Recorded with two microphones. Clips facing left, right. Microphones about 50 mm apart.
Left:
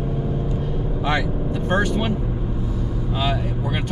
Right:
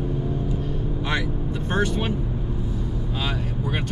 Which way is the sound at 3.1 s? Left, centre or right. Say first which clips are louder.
Left 6 dB; centre.